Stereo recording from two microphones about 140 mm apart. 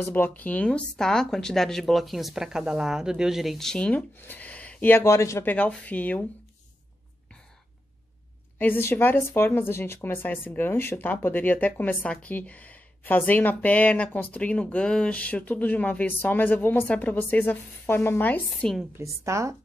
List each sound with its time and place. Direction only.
0.0 s speech: 15° left (ahead or behind)
8.5 s speech: 15° left (ahead or behind)
18.9 s speech: 20° right (ahead or behind)